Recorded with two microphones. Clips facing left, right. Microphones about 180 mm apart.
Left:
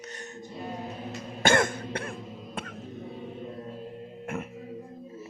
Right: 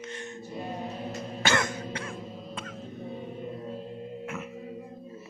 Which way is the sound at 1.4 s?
55° left (ahead or behind).